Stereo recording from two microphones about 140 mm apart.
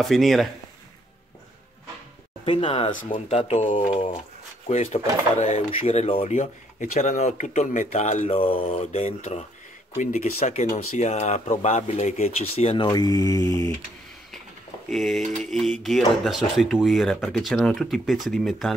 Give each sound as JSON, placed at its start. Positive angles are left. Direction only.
{"t": 0.0, "sound": "speech", "side_deg": 0}
{"t": 2.4, "sound": "speech", "side_deg": 40}
{"t": 2.9, "sound": "speech", "side_deg": 65}
{"t": 3.3, "sound": "speech", "side_deg": 50}
{"t": 3.9, "sound": "speech", "side_deg": 40}
{"t": 6.8, "sound": "speech", "side_deg": 60}
{"t": 8.3, "sound": "speech", "side_deg": 40}
{"t": 14.9, "sound": "speech", "side_deg": 0}